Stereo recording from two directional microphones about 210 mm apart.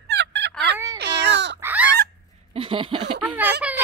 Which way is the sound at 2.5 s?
25° right (ahead or behind).